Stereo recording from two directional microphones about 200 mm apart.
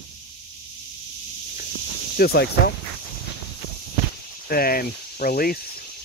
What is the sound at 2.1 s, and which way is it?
Speech, 50° left (ahead or behind).